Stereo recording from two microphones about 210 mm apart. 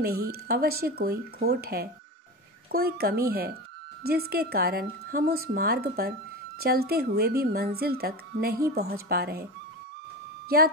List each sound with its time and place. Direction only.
0.0 s speech: 45° right (ahead or behind)